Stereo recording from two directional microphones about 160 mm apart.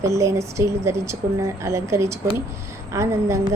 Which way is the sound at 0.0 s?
20° right (ahead or behind).